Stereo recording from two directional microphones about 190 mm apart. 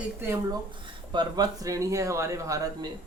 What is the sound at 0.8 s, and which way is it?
Speech, 25° right (ahead or behind).